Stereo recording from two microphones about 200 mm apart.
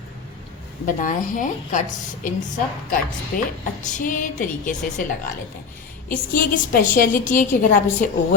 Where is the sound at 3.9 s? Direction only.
40° left (ahead or behind).